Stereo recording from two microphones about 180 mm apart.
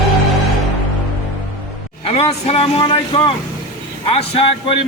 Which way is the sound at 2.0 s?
35° left (ahead or behind).